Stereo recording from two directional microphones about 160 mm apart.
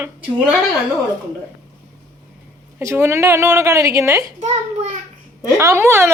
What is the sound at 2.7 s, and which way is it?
A woman's voice, 15° right (ahead or behind).